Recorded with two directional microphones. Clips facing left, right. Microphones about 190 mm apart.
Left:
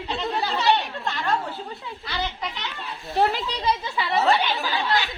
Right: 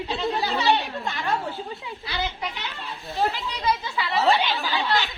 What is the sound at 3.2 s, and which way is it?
Speech, 65° left (ahead or behind).